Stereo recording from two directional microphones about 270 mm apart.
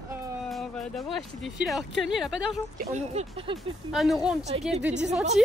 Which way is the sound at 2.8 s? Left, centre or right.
Right.